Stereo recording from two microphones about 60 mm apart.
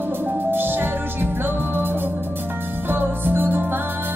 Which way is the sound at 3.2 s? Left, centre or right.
Right.